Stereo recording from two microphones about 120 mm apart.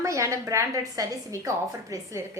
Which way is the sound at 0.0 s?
25° right (ahead or behind).